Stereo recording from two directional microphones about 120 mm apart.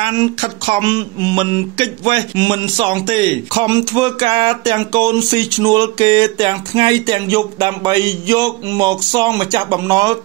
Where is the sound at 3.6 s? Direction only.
35° right (ahead or behind).